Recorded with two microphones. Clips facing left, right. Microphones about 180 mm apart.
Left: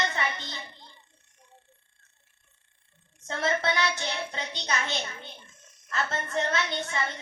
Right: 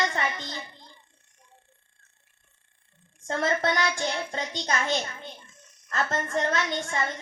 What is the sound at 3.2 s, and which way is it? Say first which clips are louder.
A woman's voice: right 2 dB; 45° right (ahead or behind).